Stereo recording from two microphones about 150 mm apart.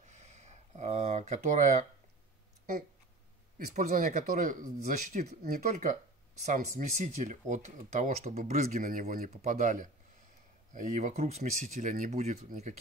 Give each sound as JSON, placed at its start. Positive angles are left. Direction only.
{"t": 0.0, "sound": "a sound", "side_deg": -50}
{"t": 3.5, "sound": "speech", "side_deg": -65}
{"t": 9.3, "sound": "speech", "side_deg": -55}